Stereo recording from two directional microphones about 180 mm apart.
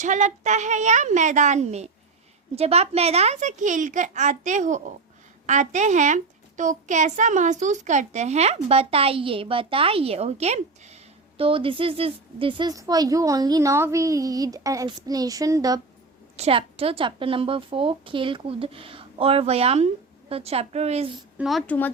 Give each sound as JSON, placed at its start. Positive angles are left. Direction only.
{"t": 0.0, "sound": "a child's voice", "side_deg": -45}
{"t": 16.4, "sound": "a child's voice", "side_deg": -30}
{"t": 21.3, "sound": "a woman's voice", "side_deg": 0}